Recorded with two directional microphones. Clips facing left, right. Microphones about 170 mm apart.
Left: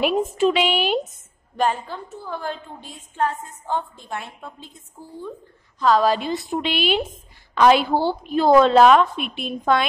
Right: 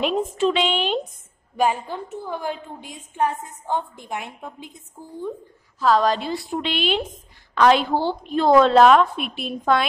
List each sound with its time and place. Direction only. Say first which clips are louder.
0.0 s a woman's voice: left 2 dB; 10° left (ahead or behind)
1.6 s a woman's voice: right 1 dB; 10° right (ahead or behind)
5.8 s a woman's voice: left 1 dB; centre (ahead or behind)
6.1 s a woman's voice: left 2 dB; 20° left (ahead or behind); by 9.8 s centre (ahead or behind)